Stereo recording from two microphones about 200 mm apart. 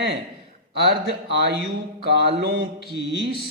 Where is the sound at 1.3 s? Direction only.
55° right (ahead or behind).